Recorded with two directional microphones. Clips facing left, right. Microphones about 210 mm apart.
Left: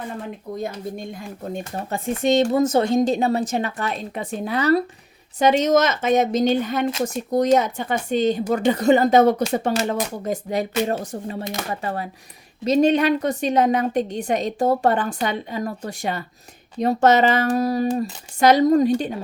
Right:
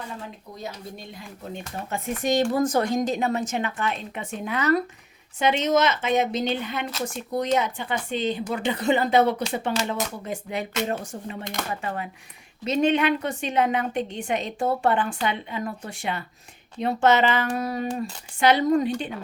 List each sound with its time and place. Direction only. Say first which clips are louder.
0.6 s speech: left 6 dB; 50° left (ahead or behind)